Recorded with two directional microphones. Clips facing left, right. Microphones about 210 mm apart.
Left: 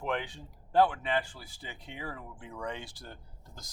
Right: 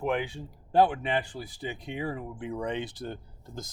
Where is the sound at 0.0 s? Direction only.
10° right (ahead or behind).